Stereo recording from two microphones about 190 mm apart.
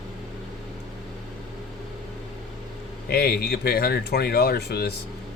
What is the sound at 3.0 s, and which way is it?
Speech, 55° left (ahead or behind).